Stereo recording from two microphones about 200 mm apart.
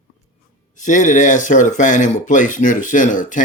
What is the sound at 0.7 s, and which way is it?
Speech, 40° left (ahead or behind).